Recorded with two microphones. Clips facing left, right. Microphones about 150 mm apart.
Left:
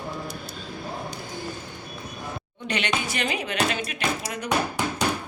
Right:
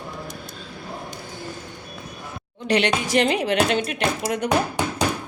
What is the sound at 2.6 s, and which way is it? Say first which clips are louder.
A woman's voice: right 7 dB; 70° right (ahead or behind).